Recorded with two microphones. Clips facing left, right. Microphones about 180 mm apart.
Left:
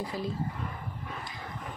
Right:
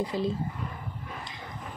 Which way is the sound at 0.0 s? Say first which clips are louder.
Right 5 dB; 20° right (ahead or behind).